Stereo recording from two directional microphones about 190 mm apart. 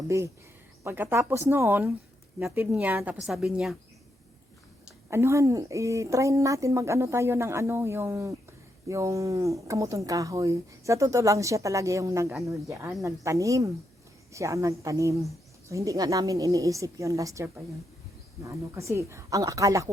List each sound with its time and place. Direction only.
0.9 s a woman's voice: 10° right (ahead or behind)
5.1 s speech: 15° right (ahead or behind)